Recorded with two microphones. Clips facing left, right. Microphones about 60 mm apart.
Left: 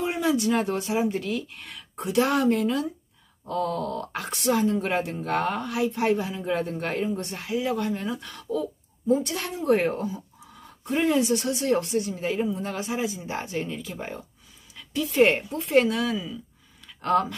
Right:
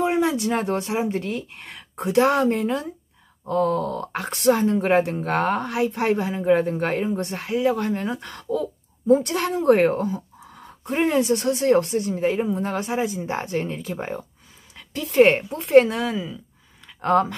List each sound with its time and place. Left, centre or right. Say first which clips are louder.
0.0 s speech: right 3 dB; right
15.0 s speech: right 5 dB; right